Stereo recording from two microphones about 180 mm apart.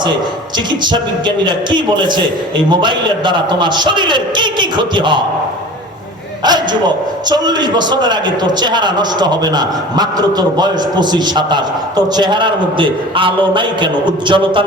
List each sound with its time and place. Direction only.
0.7 s a man's voice: 25° right (ahead or behind)
6.4 s a man's voice: 25° right (ahead or behind)